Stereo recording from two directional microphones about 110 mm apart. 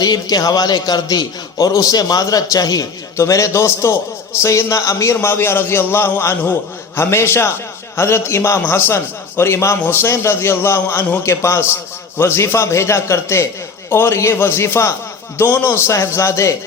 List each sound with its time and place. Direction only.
0.0 s a man's voice: 35° left (ahead or behind)